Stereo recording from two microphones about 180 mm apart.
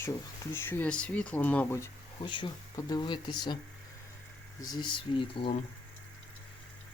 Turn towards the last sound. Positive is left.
turn(degrees=30)  # may be behind; listen again after turning